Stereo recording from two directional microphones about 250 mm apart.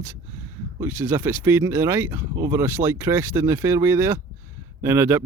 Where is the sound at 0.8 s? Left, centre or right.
Centre.